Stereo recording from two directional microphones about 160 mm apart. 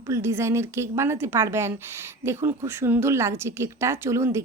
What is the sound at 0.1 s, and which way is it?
Speech, 15° right (ahead or behind).